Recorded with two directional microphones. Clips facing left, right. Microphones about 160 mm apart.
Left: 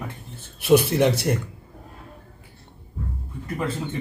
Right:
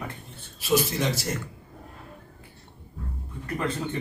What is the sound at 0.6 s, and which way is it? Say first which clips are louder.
Speech: left 7 dB; 60° left (ahead or behind).